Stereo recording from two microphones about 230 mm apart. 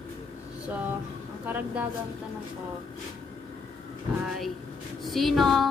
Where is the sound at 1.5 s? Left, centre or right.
Centre.